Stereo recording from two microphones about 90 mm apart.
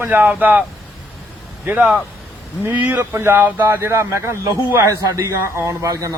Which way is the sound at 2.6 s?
20° right (ahead or behind).